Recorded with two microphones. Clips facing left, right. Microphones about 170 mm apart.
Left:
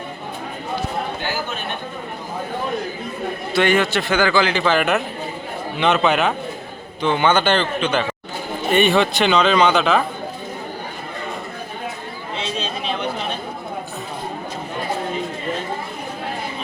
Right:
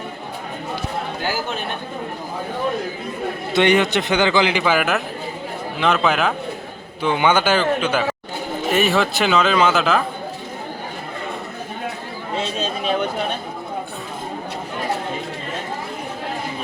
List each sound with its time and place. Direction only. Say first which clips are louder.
3.5 s a man's voice: right 1 dB; 20° right (ahead or behind); by 6.3 s centre (ahead or behind)
7.0 s a man's voice: even; 10° right (ahead or behind)